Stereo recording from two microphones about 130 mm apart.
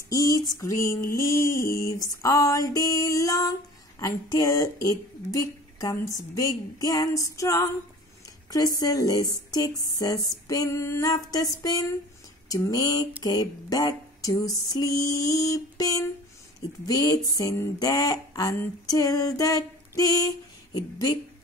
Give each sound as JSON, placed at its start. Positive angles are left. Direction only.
{"t": 0.1, "sound": "female singing", "side_deg": 30}
{"t": 8.7, "sound": "female singing", "side_deg": 30}
{"t": 20.7, "sound": "speech", "side_deg": 30}